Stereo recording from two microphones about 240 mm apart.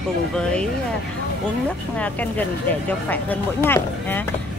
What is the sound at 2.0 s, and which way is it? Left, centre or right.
Speech, centre.